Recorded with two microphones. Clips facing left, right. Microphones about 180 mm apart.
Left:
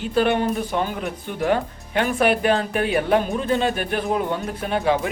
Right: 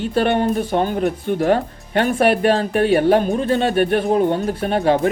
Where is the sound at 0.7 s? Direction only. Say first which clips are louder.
Right 6 dB; 40° right (ahead or behind).